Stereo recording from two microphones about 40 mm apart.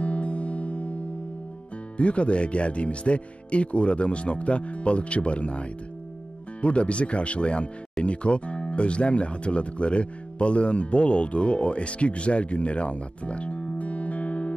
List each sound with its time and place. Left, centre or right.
0.0 s music: left
2.0 s speech: left